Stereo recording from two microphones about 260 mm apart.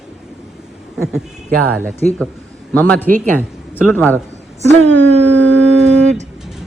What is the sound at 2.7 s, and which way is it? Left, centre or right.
A man's voice, centre.